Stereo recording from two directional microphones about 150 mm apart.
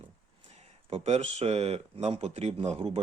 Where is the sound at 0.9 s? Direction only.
45° right (ahead or behind).